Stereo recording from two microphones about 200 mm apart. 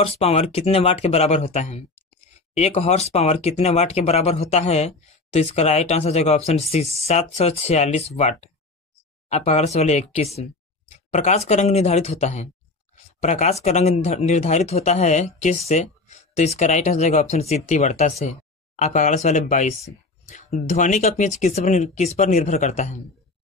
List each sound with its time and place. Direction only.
0.0 s speech: 30° left (ahead or behind)